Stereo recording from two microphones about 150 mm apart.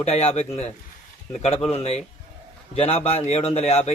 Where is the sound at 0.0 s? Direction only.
45° left (ahead or behind).